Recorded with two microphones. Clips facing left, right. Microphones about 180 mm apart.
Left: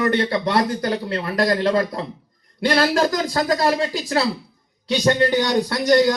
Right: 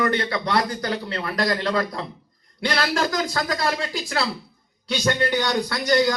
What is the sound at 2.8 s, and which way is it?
Speech, 40° left (ahead or behind).